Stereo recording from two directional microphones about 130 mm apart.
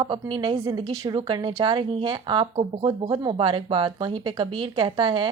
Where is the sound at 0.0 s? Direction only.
40° right (ahead or behind).